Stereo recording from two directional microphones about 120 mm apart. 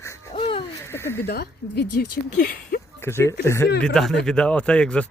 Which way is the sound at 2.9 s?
20° left (ahead or behind).